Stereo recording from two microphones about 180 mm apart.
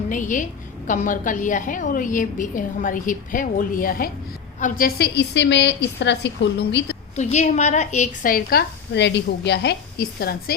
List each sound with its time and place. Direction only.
0.1 s a woman's voice: 45° left (ahead or behind); by 6.9 s 70° left (ahead or behind)
7.2 s a woman's voice: 40° left (ahead or behind); by 10.5 s 60° left (ahead or behind)